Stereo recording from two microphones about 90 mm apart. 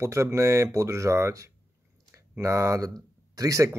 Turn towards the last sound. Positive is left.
turn(degrees=-40)  # may be behind; listen again after turning